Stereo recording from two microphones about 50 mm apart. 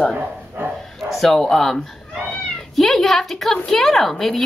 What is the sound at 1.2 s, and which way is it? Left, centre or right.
A woman's voice, centre.